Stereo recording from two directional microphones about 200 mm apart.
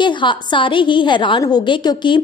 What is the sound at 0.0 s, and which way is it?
A woman's voice, 25° left (ahead or behind).